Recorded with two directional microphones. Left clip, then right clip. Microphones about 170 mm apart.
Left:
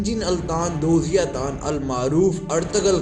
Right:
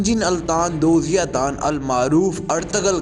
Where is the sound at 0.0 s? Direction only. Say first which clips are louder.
Right 4 dB; 50° right (ahead or behind).